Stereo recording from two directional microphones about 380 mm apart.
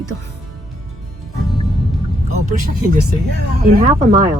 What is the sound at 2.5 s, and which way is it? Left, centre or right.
Speech, right.